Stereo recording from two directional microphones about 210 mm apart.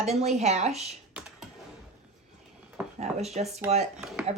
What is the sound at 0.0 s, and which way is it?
Speech, 30° right (ahead or behind).